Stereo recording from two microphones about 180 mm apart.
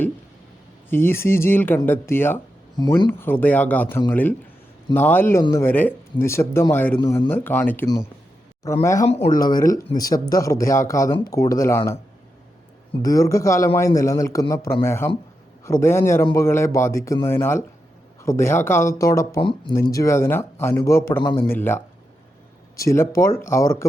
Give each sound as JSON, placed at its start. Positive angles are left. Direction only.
{"t": 0.9, "sound": "speech", "side_deg": 10}
{"t": 2.7, "sound": "speech", "side_deg": 20}
{"t": 3.1, "sound": "speech", "side_deg": 10}
{"t": 13.0, "sound": "speech", "side_deg": 20}